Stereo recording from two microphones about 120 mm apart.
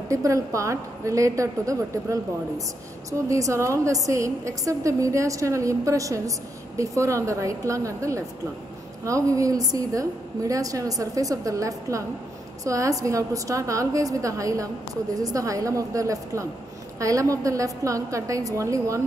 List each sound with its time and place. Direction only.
0.1 s a woman's voice: 25° right (ahead or behind)